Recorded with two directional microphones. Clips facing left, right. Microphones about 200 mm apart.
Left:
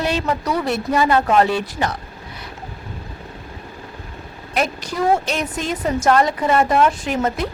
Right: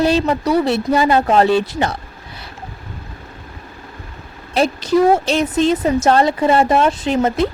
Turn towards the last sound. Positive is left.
turn(degrees=-25)  # may be behind; listen again after turning